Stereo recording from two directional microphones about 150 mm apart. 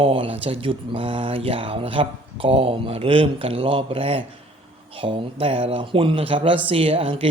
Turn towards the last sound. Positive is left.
turn(degrees=-40)  # may be behind; listen again after turning